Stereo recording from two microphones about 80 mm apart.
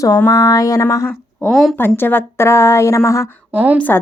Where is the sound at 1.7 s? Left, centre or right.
Left.